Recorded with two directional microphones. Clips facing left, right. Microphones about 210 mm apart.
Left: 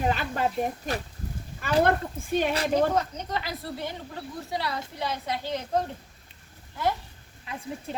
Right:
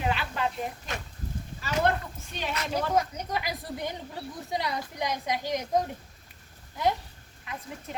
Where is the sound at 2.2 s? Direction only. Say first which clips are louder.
Left 8 dB; 50° left (ahead or behind).